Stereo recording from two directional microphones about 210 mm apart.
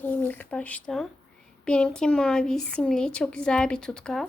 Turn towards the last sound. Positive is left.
turn(degrees=5)  # may be behind; listen again after turning